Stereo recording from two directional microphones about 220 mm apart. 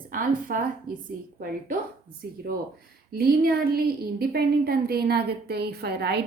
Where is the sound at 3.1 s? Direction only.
45° right (ahead or behind).